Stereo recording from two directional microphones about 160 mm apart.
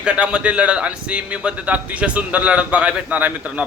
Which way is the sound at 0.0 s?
5° right (ahead or behind).